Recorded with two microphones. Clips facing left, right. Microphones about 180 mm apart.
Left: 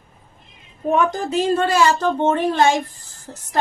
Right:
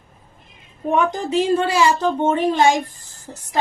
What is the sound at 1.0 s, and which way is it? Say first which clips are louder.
A woman's voice: right 3 dB; 15° right (ahead or behind).